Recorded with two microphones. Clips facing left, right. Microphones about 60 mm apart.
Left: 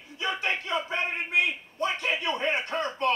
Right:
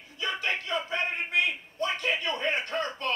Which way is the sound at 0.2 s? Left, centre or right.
Left.